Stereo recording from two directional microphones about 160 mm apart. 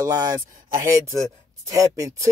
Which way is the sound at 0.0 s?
25° right (ahead or behind).